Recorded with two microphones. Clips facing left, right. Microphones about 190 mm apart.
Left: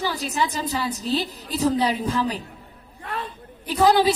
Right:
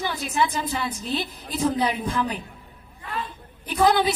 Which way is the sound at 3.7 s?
35° left (ahead or behind).